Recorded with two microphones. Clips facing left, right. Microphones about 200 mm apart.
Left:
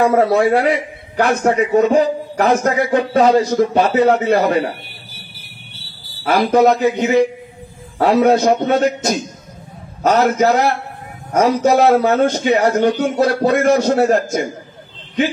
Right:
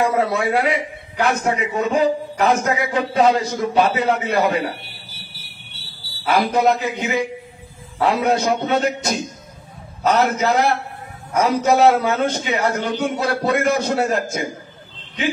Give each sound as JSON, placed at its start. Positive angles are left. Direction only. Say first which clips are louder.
{"t": 0.0, "sound": "a man's voice", "louder": "left 6 dB", "side_deg": 55}
{"t": 6.2, "sound": "a man's voice", "louder": "left 4 dB", "side_deg": 55}